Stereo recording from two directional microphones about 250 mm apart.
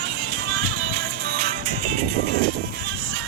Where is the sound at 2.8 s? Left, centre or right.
Right.